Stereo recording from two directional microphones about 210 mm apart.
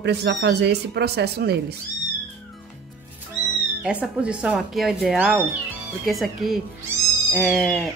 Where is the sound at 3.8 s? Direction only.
5° right (ahead or behind).